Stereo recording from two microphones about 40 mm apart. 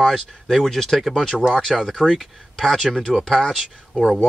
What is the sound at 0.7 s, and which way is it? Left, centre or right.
Speech, centre.